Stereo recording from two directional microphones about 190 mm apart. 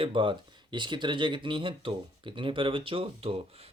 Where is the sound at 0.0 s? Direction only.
25° right (ahead or behind).